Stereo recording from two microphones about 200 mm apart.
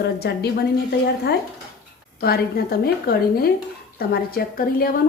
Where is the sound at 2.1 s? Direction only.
50° left (ahead or behind).